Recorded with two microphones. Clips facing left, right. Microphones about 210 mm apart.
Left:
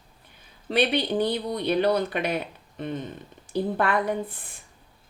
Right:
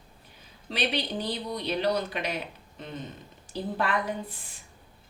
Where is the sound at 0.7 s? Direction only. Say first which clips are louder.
Left 7 dB; 55° left (ahead or behind).